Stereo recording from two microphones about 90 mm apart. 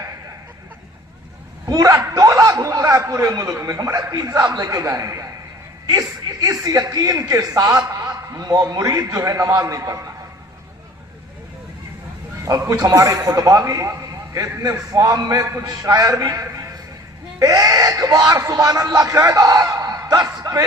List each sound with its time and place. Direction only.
1.6 s a man's voice: 40° right (ahead or behind)
12.5 s a man's voice: 40° right (ahead or behind)